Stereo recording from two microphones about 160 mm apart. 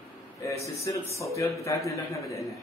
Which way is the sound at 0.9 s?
20° left (ahead or behind).